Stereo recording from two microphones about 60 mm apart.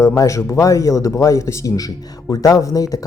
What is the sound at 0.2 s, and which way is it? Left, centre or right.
A man's voice, left.